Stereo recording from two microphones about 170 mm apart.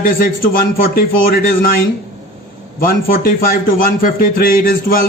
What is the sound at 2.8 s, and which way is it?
A man's voice, 55° left (ahead or behind).